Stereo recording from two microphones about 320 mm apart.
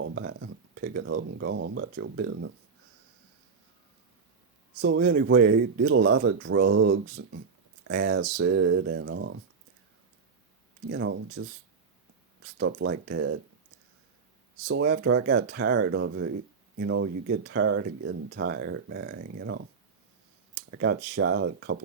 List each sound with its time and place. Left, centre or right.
0.0 s speech: right
4.8 s speech: right
10.9 s speech: right
12.5 s speech: right
14.7 s speech: right
20.6 s a sound: right
21.2 s speech: right